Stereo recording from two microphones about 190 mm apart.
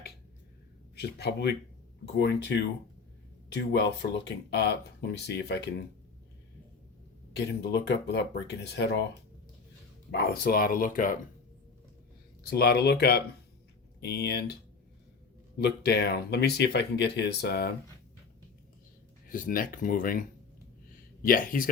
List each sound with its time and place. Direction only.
0.9 s speech: 60° left (ahead or behind)
3.7 s speech: 65° left (ahead or behind)
7.3 s speech: 65° left (ahead or behind)
10.1 s speech: 55° left (ahead or behind)
12.5 s speech: 55° left (ahead or behind)
15.5 s speech: 60° left (ahead or behind)
19.3 s speech: 45° left (ahead or behind)